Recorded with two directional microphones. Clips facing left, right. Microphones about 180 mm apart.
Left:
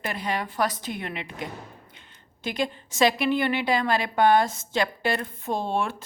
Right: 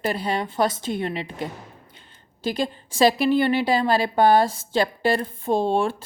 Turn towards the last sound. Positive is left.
turn(degrees=-30)  # may be behind; listen again after turning